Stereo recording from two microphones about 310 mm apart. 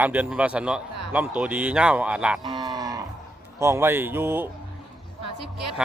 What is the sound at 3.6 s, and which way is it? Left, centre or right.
Speech, centre.